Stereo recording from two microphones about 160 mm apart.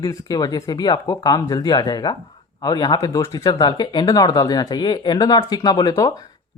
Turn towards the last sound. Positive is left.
turn(degrees=20)  # may be behind; listen again after turning